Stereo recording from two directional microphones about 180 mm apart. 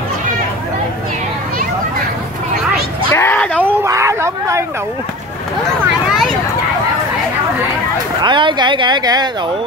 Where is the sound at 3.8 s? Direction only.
15° right (ahead or behind).